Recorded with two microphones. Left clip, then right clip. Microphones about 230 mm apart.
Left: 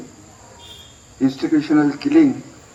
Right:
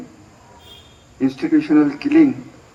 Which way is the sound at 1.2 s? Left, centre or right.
Right.